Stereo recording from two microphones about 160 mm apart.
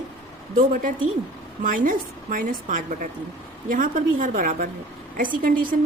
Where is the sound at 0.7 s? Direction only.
55° right (ahead or behind).